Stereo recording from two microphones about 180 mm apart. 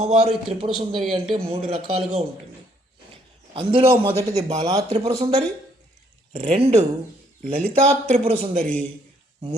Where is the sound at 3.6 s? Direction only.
30° right (ahead or behind).